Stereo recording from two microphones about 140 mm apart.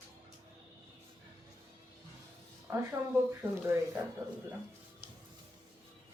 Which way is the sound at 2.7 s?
15° right (ahead or behind).